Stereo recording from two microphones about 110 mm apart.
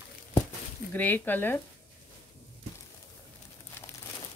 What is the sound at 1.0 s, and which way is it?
Speech, 15° left (ahead or behind).